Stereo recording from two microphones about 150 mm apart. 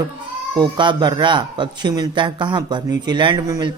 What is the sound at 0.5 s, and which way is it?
Speech, 30° right (ahead or behind).